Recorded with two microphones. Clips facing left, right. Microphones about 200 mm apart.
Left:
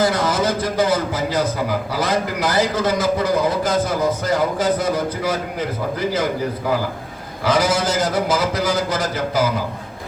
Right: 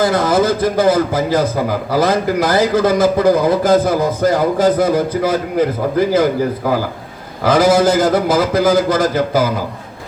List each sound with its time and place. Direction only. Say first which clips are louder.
0.0 s a man's voice: right 5 dB; 55° right (ahead or behind)
7.4 s a man's voice: right 7 dB; 55° right (ahead or behind)